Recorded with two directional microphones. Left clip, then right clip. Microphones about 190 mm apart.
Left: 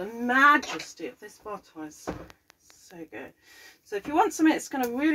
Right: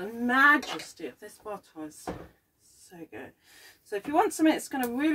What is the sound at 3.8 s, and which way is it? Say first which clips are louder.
Speech: left 1 dB; 35° right (ahead or behind).